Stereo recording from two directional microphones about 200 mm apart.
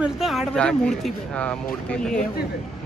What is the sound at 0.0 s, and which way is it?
Speech, centre (ahead or behind).